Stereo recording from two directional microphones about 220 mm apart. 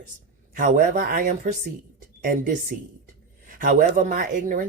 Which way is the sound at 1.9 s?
35° right (ahead or behind).